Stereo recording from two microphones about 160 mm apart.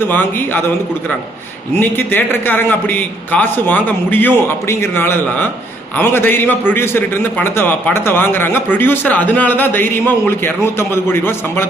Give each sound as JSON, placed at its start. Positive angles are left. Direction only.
{"t": 0.0, "sound": "a man's voice", "side_deg": 10}
{"t": 1.8, "sound": "a man's voice", "side_deg": 10}